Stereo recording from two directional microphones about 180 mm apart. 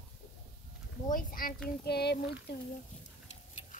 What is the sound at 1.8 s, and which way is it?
Speech, 65° left (ahead or behind).